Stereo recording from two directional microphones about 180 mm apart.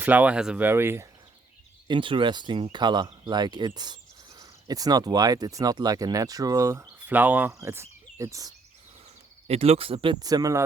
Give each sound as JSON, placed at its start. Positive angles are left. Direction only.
{"t": 0.0, "sound": "speech", "side_deg": -10}
{"t": 1.9, "sound": "speech", "side_deg": -30}
{"t": 9.5, "sound": "speech", "side_deg": -35}